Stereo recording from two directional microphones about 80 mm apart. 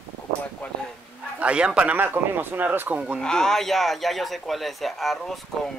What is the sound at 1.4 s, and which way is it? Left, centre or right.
Speech, centre.